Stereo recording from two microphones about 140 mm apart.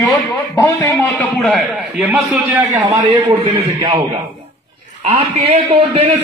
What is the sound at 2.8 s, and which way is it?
A man's voice, 45° right (ahead or behind).